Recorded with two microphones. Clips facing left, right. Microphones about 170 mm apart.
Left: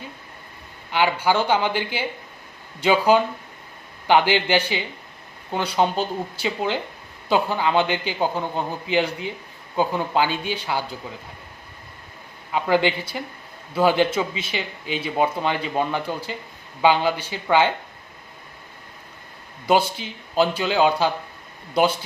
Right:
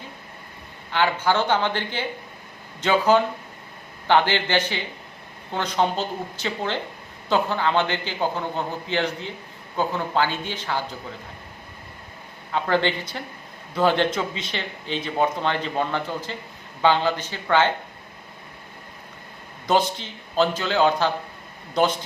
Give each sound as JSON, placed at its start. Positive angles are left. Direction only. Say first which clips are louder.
{"t": 0.9, "sound": "speech", "louder": "left 1 dB", "side_deg": 15}
{"t": 12.5, "sound": "speech", "louder": "left 2 dB", "side_deg": 10}
{"t": 19.6, "sound": "speech", "louder": "left 2 dB", "side_deg": 10}